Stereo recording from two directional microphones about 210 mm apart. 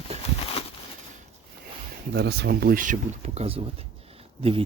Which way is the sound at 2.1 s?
50° right (ahead or behind).